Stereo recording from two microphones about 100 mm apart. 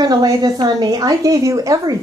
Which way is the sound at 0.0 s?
40° right (ahead or behind).